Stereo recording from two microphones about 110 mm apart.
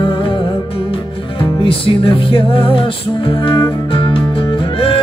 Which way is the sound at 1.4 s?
55° left (ahead or behind).